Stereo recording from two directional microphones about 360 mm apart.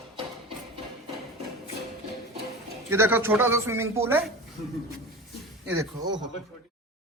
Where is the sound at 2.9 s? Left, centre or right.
Centre.